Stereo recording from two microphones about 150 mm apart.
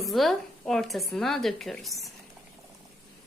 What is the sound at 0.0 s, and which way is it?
A woman's voice, centre (ahead or behind).